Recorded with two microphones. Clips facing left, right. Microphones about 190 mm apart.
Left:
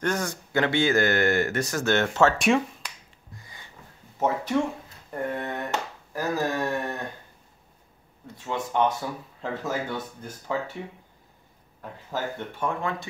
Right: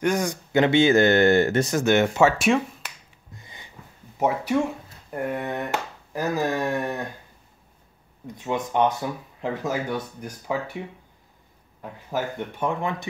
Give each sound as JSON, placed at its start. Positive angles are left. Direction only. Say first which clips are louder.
{"t": 0.0, "sound": "speech", "louder": "right 4 dB", "side_deg": -15}
{"t": 3.3, "sound": "a sound", "louder": "right 2 dB", "side_deg": -20}
{"t": 5.1, "sound": "speech", "louder": "right 2 dB", "side_deg": -10}
{"t": 8.4, "sound": "speech", "louder": "right 3 dB", "side_deg": -15}
{"t": 11.8, "sound": "speech", "louder": "right 3 dB", "side_deg": -15}